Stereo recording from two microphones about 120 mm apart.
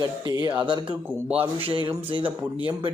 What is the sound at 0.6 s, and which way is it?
Speech, 45° right (ahead or behind).